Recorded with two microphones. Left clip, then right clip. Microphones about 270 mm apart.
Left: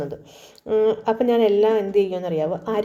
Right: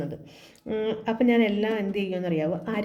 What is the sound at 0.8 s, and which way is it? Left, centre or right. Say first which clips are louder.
A woman's voice: left 7 dB; left.